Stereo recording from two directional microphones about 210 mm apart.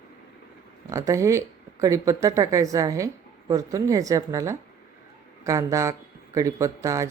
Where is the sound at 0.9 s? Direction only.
15° right (ahead or behind).